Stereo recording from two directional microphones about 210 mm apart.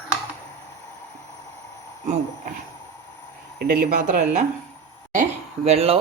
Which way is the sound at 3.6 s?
45° right (ahead or behind).